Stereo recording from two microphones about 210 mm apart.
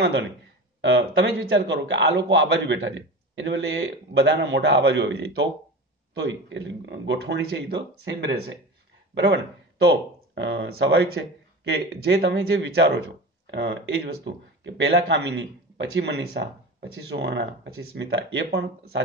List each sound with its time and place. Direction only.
0.7 s a man's voice: 60° right (ahead or behind)